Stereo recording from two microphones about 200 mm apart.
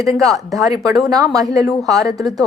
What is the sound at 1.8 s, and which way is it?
Speech, centre (ahead or behind).